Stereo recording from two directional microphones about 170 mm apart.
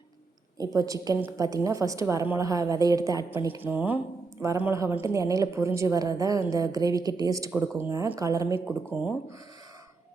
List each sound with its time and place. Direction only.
0.6 s a woman's voice: 20° right (ahead or behind)